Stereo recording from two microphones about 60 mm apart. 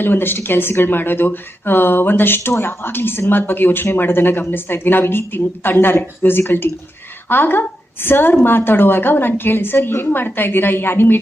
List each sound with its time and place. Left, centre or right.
0.0 s speech: left